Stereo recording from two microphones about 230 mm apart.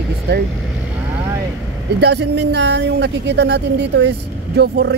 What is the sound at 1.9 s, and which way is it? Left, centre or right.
Speech, right.